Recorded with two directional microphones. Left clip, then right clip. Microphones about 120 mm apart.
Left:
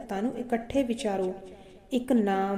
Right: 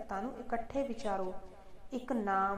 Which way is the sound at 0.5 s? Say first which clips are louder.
Left 7 dB; 15° left (ahead or behind).